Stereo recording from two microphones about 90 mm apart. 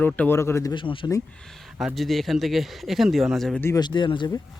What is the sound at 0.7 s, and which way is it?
Speech, 70° left (ahead or behind).